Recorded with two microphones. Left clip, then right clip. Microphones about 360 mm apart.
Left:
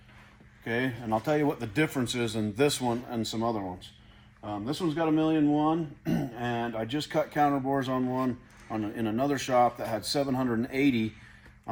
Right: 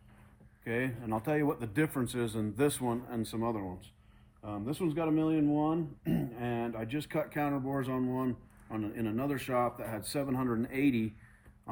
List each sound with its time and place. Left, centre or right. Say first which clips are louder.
0.6 s speech: left 4 dB; centre